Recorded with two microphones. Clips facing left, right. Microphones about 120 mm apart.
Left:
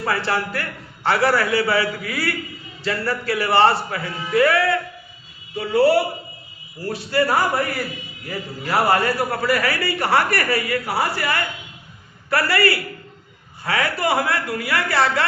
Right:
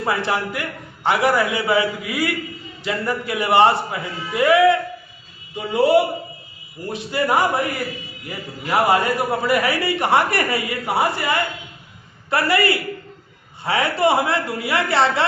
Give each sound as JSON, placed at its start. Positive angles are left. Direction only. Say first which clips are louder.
{"t": 0.0, "sound": "a man's voice", "louder": "right 1 dB", "side_deg": -15}
{"t": 8.6, "sound": "a man's voice", "louder": "right 1 dB", "side_deg": -15}